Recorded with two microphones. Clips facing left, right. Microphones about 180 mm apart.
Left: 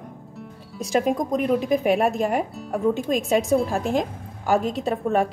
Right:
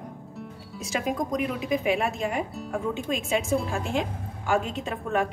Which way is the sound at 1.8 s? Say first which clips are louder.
Left 6 dB; 45° left (ahead or behind).